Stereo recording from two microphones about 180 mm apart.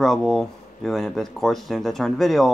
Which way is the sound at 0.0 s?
Centre (ahead or behind).